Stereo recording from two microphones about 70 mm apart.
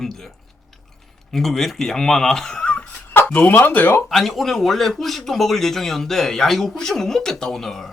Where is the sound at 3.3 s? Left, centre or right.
Left.